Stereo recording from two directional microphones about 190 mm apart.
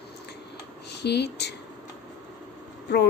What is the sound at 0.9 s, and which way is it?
Speech, 60° left (ahead or behind).